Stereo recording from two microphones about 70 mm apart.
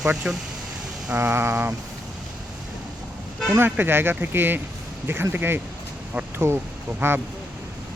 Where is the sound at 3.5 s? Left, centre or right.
Right.